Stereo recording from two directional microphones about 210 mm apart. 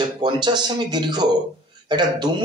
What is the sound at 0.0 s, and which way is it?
A man's voice, 20° right (ahead or behind).